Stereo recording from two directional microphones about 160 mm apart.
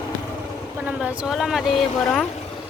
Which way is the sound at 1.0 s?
5° right (ahead or behind).